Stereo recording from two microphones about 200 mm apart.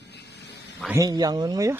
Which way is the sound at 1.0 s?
20° right (ahead or behind).